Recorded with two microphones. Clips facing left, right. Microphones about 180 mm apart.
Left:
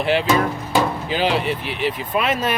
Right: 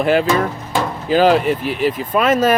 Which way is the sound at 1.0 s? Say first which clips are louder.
Right 7 dB; 45° right (ahead or behind).